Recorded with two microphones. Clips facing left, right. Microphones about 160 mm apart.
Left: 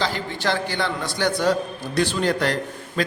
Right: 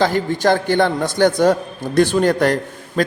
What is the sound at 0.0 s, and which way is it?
A man's voice, 45° right (ahead or behind).